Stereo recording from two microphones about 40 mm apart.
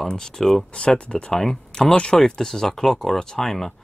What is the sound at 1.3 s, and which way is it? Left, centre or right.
Speech, centre.